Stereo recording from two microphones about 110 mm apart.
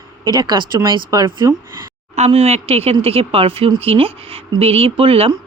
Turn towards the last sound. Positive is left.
turn(degrees=-55)  # may be behind; listen again after turning